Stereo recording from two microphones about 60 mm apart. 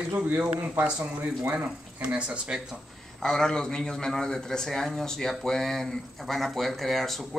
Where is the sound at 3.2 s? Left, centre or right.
Centre.